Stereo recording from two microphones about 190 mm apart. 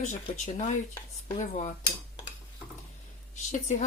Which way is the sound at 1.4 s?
40° left (ahead or behind).